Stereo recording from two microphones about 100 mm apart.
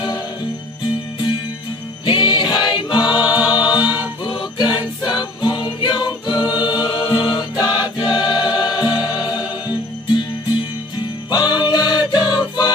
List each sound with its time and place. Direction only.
2.0 s music: 50° left (ahead or behind)
3.2 s music: 10° right (ahead or behind)
3.5 s music: 45° left (ahead or behind)
3.8 s choir: 15° right (ahead or behind)
4.2 s music: 50° left (ahead or behind)
8.0 s choir: 50° left (ahead or behind)
11.0 s music: 45° left (ahead or behind)